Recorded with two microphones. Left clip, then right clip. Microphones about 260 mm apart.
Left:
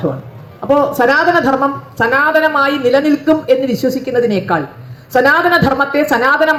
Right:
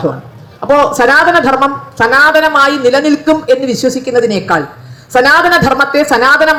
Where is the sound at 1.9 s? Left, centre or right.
Right.